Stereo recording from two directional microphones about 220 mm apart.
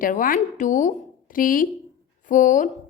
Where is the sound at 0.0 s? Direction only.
40° left (ahead or behind).